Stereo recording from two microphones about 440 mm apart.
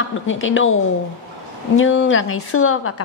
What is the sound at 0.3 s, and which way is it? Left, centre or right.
Speech, left.